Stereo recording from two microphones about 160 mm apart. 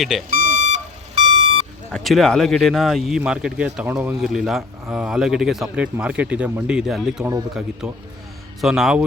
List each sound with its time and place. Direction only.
0.0 s speech: centre (ahead or behind)
0.3 s alarm clock: 55° right (ahead or behind)
1.9 s speech: centre (ahead or behind)
8.6 s speech: centre (ahead or behind)